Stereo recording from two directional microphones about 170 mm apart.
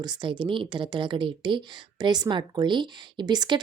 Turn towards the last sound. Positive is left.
turn(degrees=-25)  # may be behind; listen again after turning